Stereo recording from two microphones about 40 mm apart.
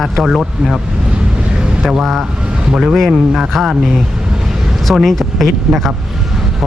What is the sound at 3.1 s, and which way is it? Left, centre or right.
Speech, centre.